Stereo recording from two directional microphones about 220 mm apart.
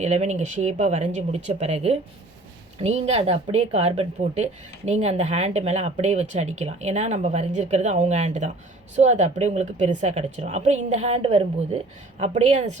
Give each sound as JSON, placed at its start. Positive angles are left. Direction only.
{"t": 0.0, "sound": "a woman's voice", "side_deg": -30}